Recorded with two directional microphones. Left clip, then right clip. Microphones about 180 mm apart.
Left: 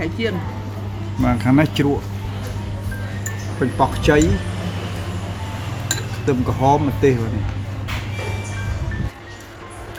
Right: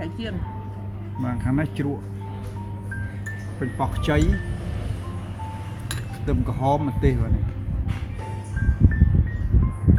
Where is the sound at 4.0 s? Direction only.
15° right (ahead or behind).